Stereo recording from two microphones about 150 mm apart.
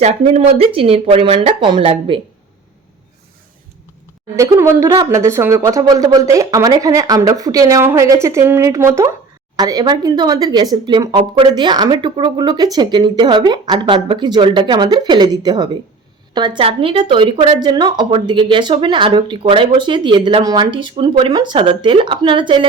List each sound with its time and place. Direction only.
0.0 s speech: 45° right (ahead or behind)
4.4 s speech: 20° right (ahead or behind)